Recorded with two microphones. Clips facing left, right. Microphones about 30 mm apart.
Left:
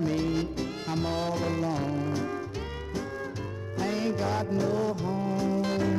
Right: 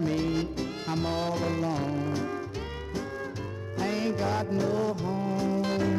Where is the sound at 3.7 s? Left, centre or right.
Centre.